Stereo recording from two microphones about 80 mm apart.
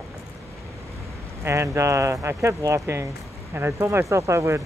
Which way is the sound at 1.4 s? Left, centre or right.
Right.